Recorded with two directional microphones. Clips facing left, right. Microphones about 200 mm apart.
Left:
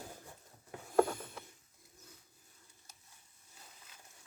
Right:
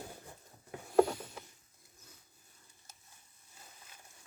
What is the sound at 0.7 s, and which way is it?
Vehicle, 15° right (ahead or behind).